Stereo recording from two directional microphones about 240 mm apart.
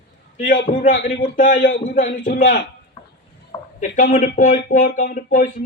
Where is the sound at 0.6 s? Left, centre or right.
Left.